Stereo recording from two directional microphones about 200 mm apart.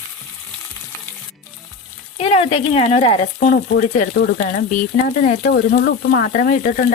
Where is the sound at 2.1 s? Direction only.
30° left (ahead or behind).